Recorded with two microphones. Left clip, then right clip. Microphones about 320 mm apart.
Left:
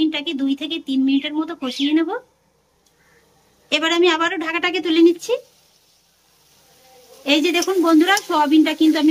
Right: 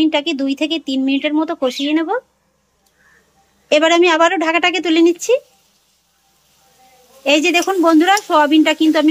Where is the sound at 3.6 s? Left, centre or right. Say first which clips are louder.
Right 5 dB; centre.